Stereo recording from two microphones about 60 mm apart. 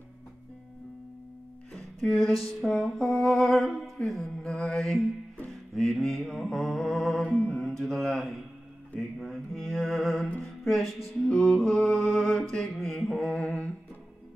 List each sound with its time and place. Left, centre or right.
2.0 s music: centre
7.2 s mantra: left
7.6 s mantra: centre
9.2 s music: centre
10.4 s speech: centre
11.2 s music: centre